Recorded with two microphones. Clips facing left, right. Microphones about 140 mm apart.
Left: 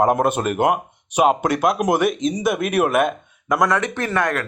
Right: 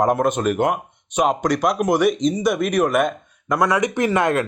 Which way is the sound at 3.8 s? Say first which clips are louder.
Right 3 dB; 15° right (ahead or behind).